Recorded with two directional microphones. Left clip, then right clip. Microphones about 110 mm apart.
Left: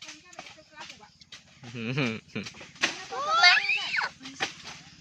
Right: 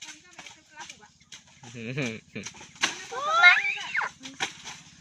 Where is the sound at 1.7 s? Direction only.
25° left (ahead or behind).